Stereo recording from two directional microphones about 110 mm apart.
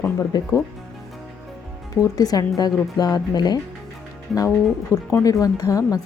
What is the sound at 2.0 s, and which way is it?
Speech, 35° left (ahead or behind).